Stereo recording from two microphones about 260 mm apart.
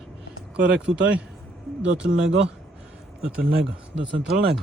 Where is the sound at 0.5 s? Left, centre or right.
Centre.